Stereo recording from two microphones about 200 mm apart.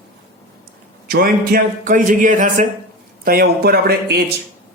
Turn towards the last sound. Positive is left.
turn(degrees=-50)  # may be behind; listen again after turning